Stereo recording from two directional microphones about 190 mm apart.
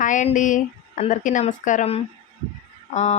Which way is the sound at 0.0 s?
40° left (ahead or behind).